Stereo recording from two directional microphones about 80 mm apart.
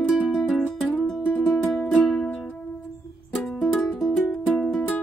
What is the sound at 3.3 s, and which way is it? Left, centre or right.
Music, centre.